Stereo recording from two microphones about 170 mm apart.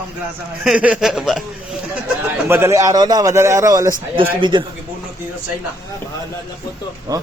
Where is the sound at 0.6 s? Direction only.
5° right (ahead or behind).